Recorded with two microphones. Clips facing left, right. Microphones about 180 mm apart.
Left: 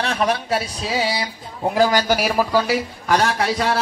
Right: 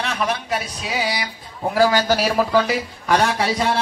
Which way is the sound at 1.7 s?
15° left (ahead or behind).